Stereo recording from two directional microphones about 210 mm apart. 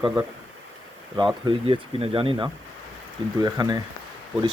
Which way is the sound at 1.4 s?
25° right (ahead or behind).